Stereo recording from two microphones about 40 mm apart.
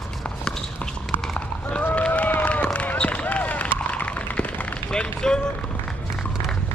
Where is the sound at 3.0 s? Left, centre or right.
Left.